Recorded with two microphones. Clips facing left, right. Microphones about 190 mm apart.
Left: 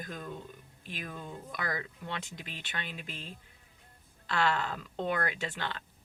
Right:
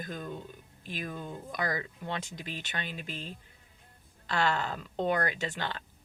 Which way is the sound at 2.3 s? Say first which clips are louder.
Right 4 dB; 40° right (ahead or behind).